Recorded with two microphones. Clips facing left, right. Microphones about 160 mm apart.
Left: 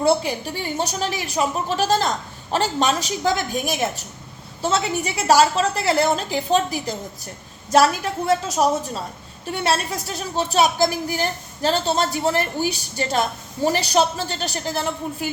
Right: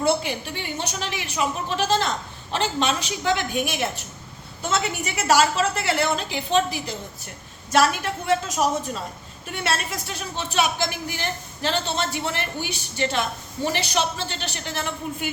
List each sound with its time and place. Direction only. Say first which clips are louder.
0.0 s speech: left 3 dB; 35° left (ahead or behind)